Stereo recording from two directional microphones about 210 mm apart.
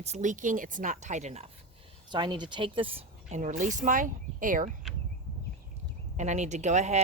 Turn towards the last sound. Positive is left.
turn(degrees=-35)  # may be behind; listen again after turning